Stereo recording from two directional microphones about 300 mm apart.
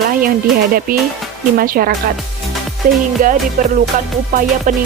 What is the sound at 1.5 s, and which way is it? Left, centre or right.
Speech, right.